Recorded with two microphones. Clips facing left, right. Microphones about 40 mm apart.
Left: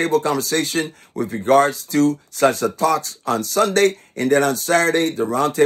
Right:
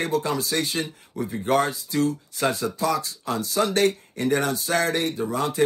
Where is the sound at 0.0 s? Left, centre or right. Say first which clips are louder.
Left 6 dB; left.